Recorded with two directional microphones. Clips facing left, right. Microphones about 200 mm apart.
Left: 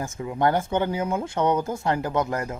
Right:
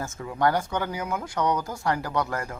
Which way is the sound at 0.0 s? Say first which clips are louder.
Left 2 dB; 15° left (ahead or behind).